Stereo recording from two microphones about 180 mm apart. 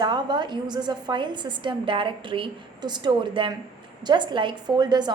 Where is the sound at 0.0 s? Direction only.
25° right (ahead or behind).